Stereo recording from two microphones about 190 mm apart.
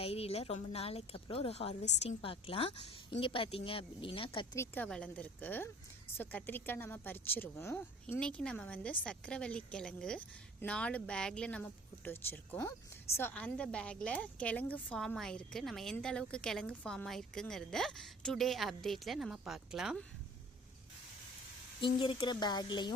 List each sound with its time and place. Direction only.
0.0 s a woman's voice: 30° left (ahead or behind)
4.5 s a woman's voice: 10° left (ahead or behind)
22.0 s a woman's voice: 25° left (ahead or behind)